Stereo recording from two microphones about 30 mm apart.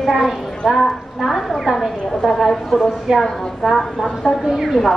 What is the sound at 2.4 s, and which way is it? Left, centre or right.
Speech, centre.